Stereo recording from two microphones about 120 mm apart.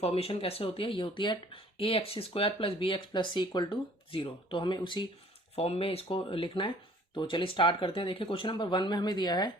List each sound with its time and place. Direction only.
0.0 s speech: 55° left (ahead or behind)
5.5 s speech: 55° left (ahead or behind); by 9.5 s 35° left (ahead or behind)